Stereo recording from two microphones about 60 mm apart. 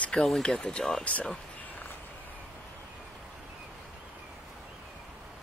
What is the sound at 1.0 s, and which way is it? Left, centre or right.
Speech, left.